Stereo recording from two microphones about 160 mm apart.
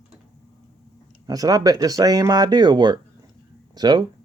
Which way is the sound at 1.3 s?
20° right (ahead or behind).